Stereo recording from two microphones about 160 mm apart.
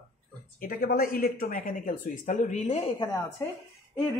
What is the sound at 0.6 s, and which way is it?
Speech, 70° left (ahead or behind).